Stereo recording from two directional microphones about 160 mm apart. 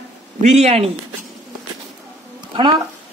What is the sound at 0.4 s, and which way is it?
Speech, 45° right (ahead or behind).